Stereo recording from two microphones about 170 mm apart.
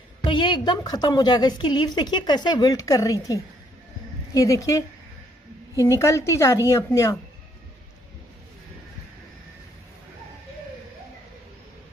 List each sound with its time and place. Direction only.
0.2 s a woman's voice: 30° left (ahead or behind)